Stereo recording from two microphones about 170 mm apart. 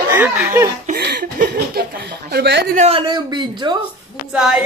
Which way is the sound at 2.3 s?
85° right.